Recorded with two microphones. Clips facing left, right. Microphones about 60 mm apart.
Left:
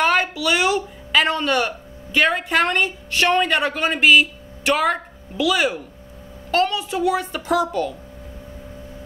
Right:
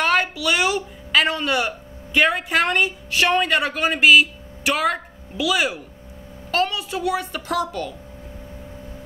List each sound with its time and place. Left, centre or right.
0.0 s a child's voice: centre